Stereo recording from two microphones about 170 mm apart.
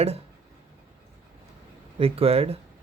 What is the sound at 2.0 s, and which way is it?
Speech, 35° right (ahead or behind).